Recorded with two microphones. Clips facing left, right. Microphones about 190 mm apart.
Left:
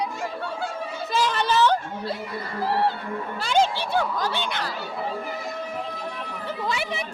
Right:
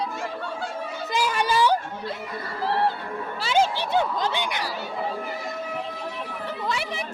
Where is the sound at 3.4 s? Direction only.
5° right (ahead or behind).